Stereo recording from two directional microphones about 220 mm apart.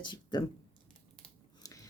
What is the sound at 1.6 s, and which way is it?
Biting, 15° left (ahead or behind).